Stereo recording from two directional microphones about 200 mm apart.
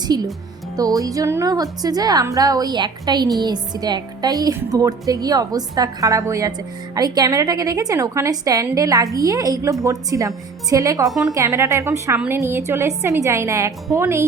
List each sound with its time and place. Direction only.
0.1 s a woman's voice: 20° right (ahead or behind)